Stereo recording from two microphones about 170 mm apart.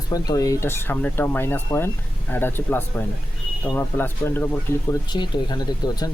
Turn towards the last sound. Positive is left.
turn(degrees=25)  # may be behind; listen again after turning